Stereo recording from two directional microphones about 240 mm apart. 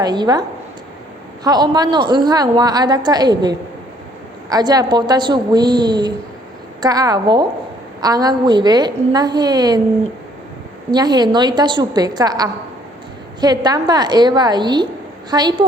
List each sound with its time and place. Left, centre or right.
0.0 s a woman's voice: centre
1.5 s a woman's voice: centre
10.9 s a woman's voice: centre